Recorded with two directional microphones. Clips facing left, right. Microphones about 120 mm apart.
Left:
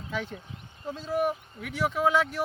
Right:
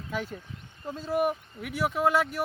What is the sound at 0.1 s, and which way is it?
Speech, 5° right (ahead or behind).